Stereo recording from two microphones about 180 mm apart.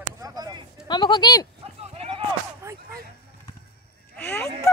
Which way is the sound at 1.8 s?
30° right (ahead or behind).